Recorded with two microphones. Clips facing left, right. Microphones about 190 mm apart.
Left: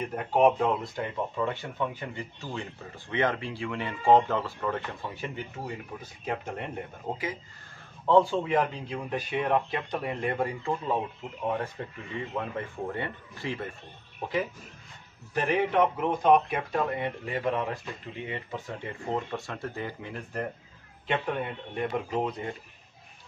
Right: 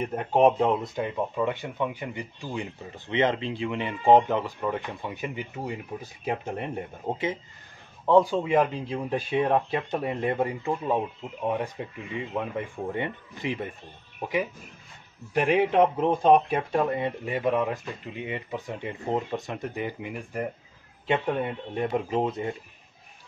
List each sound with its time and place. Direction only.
0.0 s speech: 25° right (ahead or behind)
7.1 s speech: 15° right (ahead or behind)
8.8 s speech: 25° right (ahead or behind)
15.8 s speech: 30° right (ahead or behind)